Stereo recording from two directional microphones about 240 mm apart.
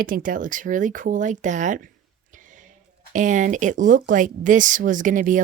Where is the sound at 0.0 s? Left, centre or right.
Right.